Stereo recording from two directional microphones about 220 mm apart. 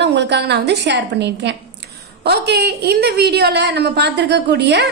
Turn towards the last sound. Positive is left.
turn(degrees=-50)  # may be behind; listen again after turning